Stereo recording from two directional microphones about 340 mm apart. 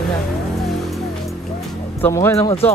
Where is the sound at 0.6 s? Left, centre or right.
Centre.